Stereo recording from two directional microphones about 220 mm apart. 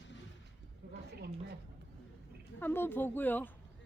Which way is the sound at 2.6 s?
10° left (ahead or behind).